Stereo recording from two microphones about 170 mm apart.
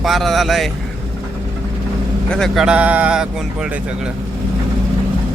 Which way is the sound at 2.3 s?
Centre (ahead or behind).